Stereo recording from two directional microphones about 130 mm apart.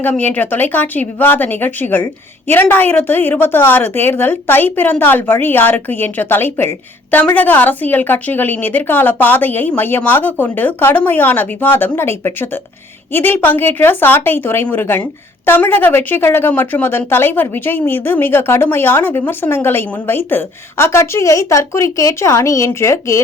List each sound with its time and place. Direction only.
0.0 s a woman's voice: 15° left (ahead or behind)